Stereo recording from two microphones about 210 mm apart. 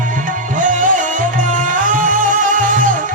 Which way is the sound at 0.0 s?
40° right (ahead or behind).